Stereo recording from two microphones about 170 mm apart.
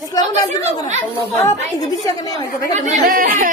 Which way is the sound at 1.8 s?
20° left (ahead or behind).